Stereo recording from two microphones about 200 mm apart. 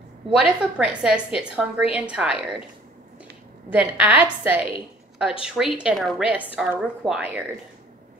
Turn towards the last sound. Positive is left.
turn(degrees=-5)  # may be behind; listen again after turning